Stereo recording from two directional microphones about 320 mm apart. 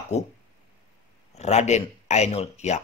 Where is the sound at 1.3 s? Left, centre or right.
Left.